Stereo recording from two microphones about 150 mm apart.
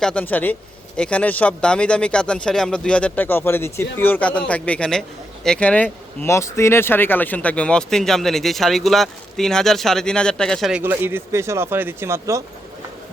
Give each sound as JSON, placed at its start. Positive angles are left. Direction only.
{"t": 0.0, "sound": "speech", "side_deg": 10}